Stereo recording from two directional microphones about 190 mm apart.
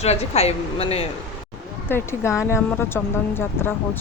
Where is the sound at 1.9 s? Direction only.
15° left (ahead or behind).